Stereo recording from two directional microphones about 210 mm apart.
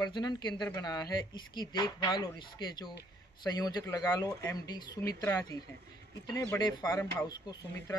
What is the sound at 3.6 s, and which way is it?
Speech, 20° left (ahead or behind).